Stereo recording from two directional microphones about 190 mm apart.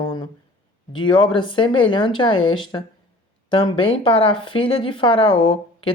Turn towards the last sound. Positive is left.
turn(degrees=25)  # may be behind; listen again after turning